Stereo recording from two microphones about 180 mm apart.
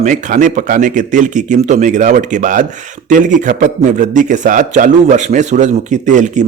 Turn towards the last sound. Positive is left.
turn(degrees=-40)  # may be behind; listen again after turning